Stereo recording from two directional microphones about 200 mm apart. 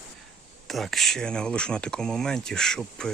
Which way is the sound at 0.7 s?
Centre (ahead or behind).